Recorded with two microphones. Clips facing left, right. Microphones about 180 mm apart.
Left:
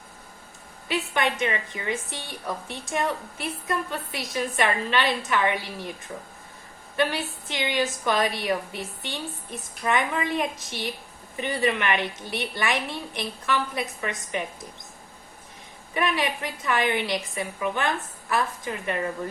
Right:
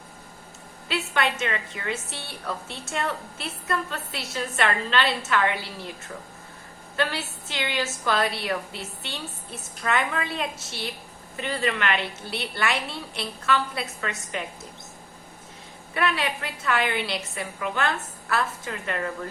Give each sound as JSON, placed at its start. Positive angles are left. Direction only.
{"t": 0.9, "sound": "a woman's voice", "side_deg": 15}
{"t": 6.9, "sound": "a woman's voice", "side_deg": 15}
{"t": 16.0, "sound": "a woman's voice", "side_deg": 15}